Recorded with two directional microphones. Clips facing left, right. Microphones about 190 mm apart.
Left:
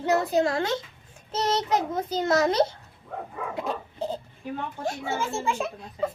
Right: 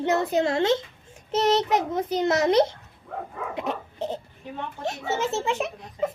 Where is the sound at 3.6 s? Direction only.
20° right (ahead or behind).